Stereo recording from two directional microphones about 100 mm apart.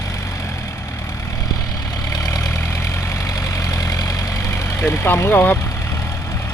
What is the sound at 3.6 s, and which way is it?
Vehicle, 35° left (ahead or behind).